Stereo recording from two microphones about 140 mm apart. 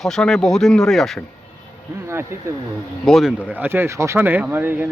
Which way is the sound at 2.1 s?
20° right (ahead or behind).